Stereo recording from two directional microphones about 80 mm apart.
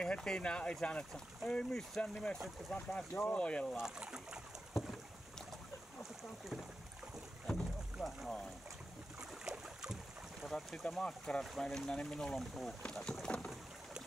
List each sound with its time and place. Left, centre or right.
0.0 s speech: centre
3.7 s speech: centre
7.4 s rowboat: centre
9.2 s boat: centre
10.5 s speech: centre